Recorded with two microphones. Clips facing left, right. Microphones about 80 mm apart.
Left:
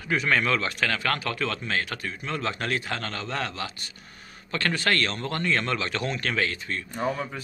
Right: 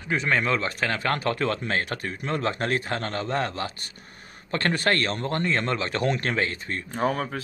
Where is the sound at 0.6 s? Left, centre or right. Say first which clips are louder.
Right 1 dB; right.